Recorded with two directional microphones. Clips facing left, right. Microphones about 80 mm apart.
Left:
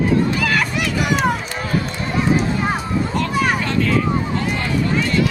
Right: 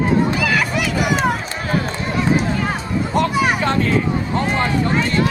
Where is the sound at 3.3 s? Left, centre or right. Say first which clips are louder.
Right 1 dB; centre.